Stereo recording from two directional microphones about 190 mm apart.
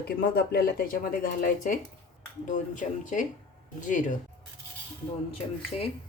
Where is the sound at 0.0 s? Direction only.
55° left (ahead or behind).